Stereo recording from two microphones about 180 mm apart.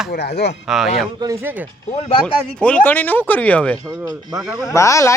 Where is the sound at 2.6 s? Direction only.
5° left (ahead or behind).